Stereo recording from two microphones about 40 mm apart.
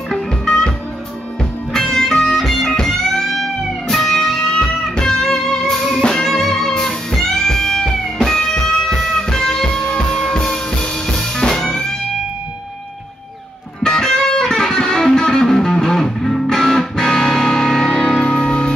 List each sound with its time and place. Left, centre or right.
1.7 s music: centre
13.8 s music: centre